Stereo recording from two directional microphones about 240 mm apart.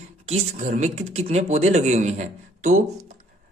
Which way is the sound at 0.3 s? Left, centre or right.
Right.